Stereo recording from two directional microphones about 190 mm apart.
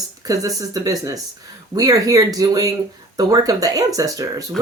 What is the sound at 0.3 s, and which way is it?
Speech, 20° right (ahead or behind).